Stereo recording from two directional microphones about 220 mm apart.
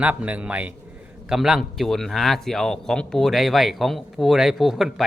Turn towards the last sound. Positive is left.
turn(degrees=0)  # may be behind; listen again after turning